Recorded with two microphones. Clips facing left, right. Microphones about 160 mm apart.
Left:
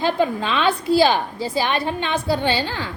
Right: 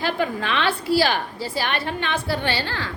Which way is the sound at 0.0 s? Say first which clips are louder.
Left 4 dB; 20° left (ahead or behind).